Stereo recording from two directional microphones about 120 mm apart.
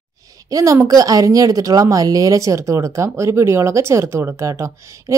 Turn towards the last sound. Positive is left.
turn(degrees=-25)  # may be behind; listen again after turning